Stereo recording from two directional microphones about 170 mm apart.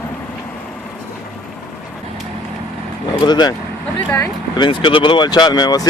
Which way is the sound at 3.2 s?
25° left (ahead or behind).